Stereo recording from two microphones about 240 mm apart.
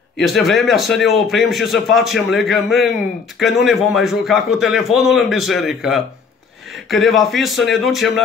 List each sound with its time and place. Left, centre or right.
0.2 s a man's voice: centre